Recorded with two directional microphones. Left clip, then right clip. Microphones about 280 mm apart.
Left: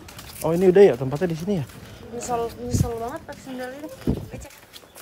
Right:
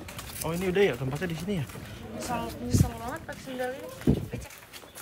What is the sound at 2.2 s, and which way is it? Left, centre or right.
Speech, left.